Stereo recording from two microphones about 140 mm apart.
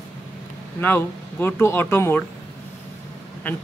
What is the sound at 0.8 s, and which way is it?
Speech, 15° left (ahead or behind).